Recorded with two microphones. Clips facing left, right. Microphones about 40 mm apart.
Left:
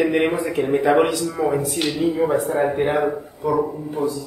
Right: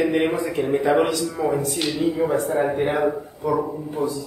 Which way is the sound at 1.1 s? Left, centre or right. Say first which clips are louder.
Left 1 dB; centre.